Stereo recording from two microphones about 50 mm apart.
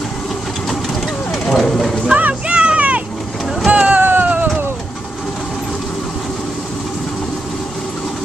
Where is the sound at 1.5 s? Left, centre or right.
Centre.